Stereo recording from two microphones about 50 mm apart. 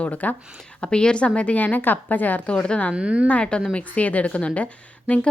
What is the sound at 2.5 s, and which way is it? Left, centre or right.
Speech, left.